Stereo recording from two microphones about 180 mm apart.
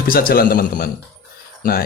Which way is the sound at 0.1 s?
55° left (ahead or behind).